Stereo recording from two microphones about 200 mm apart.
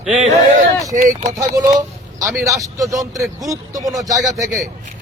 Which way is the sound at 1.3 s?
20° right (ahead or behind).